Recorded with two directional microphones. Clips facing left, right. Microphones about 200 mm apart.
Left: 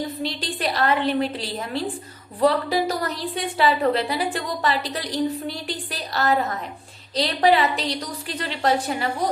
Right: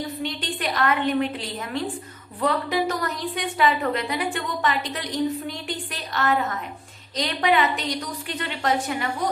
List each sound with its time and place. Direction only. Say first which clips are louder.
0.2 s a woman's voice: left 2 dB; 35° left (ahead or behind)